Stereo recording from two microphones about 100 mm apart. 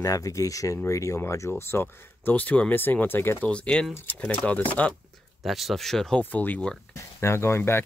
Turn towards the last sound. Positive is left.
turn(degrees=25)  # may be behind; listen again after turning